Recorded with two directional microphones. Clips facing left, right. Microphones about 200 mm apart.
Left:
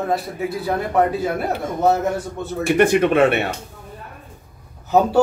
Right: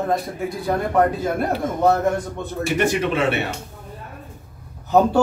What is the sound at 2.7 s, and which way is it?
Speech, 55° left (ahead or behind).